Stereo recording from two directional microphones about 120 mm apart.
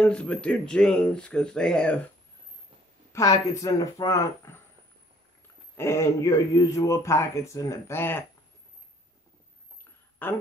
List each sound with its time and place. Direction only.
0.0 s speech: 10° left (ahead or behind)
3.1 s a man's voice: 25° left (ahead or behind)
5.8 s a man's voice: 20° left (ahead or behind)
10.2 s speech: 15° left (ahead or behind)